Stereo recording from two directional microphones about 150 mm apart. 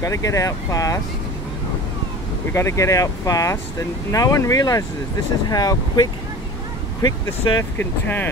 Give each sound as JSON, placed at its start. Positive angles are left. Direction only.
{"t": 0.0, "sound": "speech", "side_deg": 20}
{"t": 2.5, "sound": "speech", "side_deg": 20}